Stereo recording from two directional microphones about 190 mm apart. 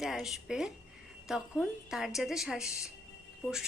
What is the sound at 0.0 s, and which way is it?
A woman's voice, centre (ahead or behind).